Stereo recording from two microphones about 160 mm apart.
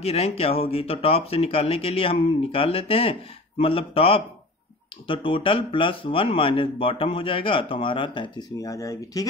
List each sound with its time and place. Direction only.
0.0 s speech: 40° left (ahead or behind); by 9.3 s 20° left (ahead or behind)